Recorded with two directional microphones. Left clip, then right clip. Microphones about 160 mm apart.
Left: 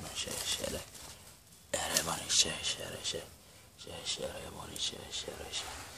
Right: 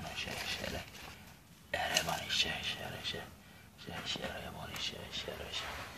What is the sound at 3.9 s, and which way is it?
Speech, 45° left (ahead or behind).